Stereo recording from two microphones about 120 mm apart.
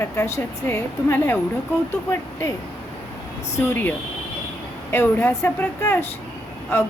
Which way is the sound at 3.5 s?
20° left (ahead or behind).